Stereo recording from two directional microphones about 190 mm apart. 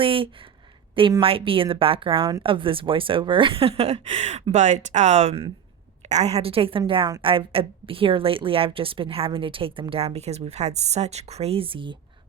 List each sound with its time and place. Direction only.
0.0 s a woman's voice: 30° right (ahead or behind)